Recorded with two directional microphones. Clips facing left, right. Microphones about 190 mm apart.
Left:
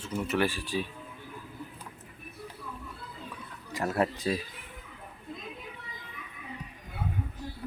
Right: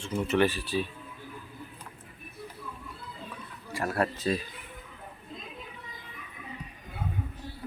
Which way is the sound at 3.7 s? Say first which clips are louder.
Left 1 dB; 20° left (ahead or behind).